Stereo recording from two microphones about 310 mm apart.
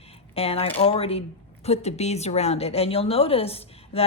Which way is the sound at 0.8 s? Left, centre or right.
Centre.